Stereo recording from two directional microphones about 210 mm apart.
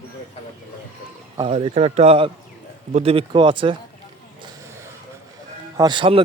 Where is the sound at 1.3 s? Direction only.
25° right (ahead or behind).